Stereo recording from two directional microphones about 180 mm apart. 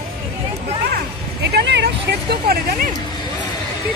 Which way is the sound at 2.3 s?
60° right (ahead or behind).